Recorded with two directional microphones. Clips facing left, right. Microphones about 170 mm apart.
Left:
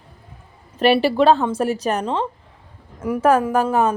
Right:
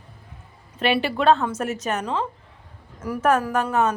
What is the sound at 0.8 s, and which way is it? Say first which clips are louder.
A woman's voice: left 7 dB; 35° left (ahead or behind).